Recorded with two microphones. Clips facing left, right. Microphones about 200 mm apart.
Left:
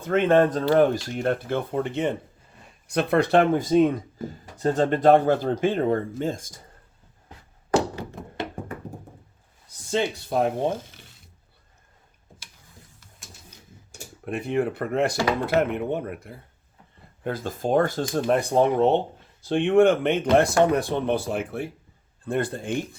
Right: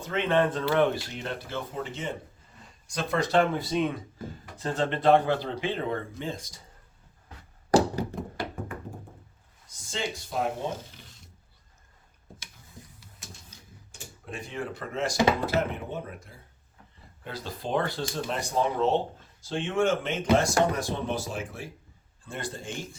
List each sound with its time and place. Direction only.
0.0 s speech: 50° left (ahead or behind)
8.2 s hands: centre (ahead or behind)
9.6 s speech: 60° left (ahead or behind)
13.2 s a sound: centre (ahead or behind)
14.3 s speech: 60° left (ahead or behind)